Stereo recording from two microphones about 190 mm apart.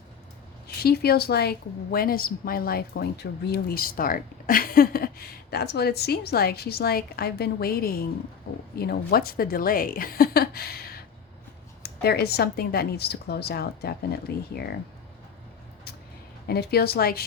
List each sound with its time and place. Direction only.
0.8 s a woman's voice: 55° left (ahead or behind)
16.5 s a woman's voice: 55° left (ahead or behind)